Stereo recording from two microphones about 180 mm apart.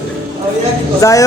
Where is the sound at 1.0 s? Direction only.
20° left (ahead or behind).